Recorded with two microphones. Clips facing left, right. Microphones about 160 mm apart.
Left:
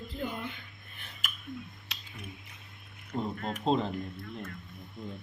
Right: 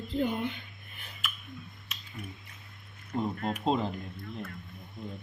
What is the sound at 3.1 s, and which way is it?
Speech, centre (ahead or behind).